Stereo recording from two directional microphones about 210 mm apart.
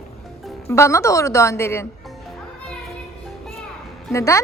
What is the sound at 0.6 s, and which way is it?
A woman's voice, 15° left (ahead or behind).